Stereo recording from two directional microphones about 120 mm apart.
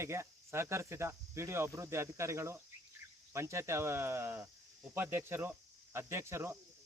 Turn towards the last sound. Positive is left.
turn(degrees=-20)  # may be behind; listen again after turning